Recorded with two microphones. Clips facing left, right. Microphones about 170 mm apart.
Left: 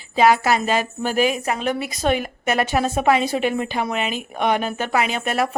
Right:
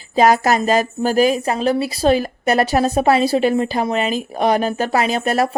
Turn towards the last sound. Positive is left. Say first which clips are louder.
# right 4 dB
turn(degrees=-40)  # may be behind; listen again after turning